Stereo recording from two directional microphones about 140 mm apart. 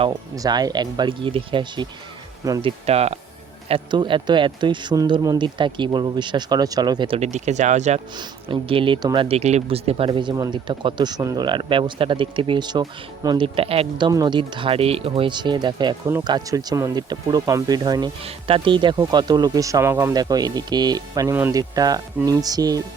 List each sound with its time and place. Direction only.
0.3 s speech: 25° right (ahead or behind); by 3.2 s 50° right (ahead or behind)
3.7 s speech: 35° right (ahead or behind)
7.2 s speech: 55° right (ahead or behind)
8.1 s speech: 35° right (ahead or behind)
9.1 s speech: 50° right (ahead or behind)
10.1 s speech: 30° right (ahead or behind)
14.1 s speech: 30° right (ahead or behind)
18.2 s speech: 45° right (ahead or behind); by 20.1 s 15° right (ahead or behind)
20.1 s speech: 30° right (ahead or behind)
21.3 s speech: 15° right (ahead or behind)